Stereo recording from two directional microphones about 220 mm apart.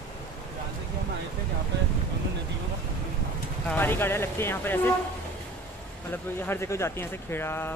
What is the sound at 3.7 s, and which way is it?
Speech, 10° left (ahead or behind).